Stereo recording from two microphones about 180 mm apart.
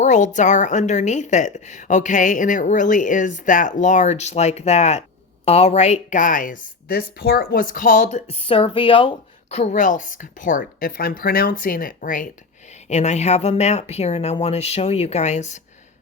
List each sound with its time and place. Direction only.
0.0 s a woman's voice: 40° left (ahead or behind)